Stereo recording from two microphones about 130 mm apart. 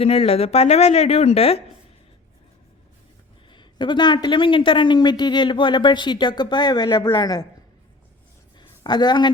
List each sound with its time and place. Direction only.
0.0 s a woman's voice: 50° left (ahead or behind)
3.5 s speech: 35° left (ahead or behind)
8.5 s a sound: 35° left (ahead or behind)